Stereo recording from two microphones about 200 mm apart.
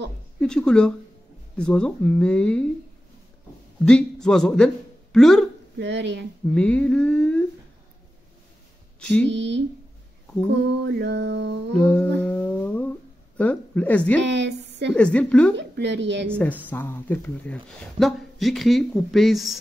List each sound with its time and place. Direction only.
0.4 s speech: 5° left (ahead or behind)
3.8 s speech: centre (ahead or behind)
5.8 s speech: 60° right (ahead or behind)
6.4 s speech: 5° left (ahead or behind)
9.0 s speech: 5° left (ahead or behind)
9.3 s speech: 60° right (ahead or behind)
10.7 s mantra: 55° right (ahead or behind)
11.8 s humming: 5° left (ahead or behind)
13.4 s speech: 5° left (ahead or behind)
14.2 s a sound: 60° right (ahead or behind)
15.0 s speech: 5° left (ahead or behind)
15.5 s speech: 60° right (ahead or behind)
16.3 s speech: 10° left (ahead or behind)